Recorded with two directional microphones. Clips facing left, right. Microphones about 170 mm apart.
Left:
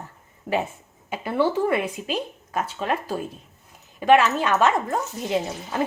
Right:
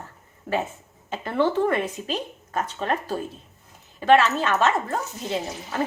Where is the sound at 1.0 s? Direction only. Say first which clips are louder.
Even; 10° left (ahead or behind).